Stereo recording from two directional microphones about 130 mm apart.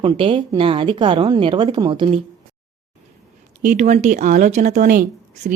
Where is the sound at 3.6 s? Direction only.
65° right (ahead or behind).